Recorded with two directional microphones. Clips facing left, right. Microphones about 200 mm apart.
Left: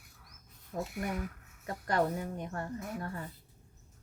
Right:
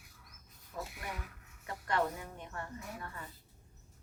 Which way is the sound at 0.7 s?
45° left (ahead or behind).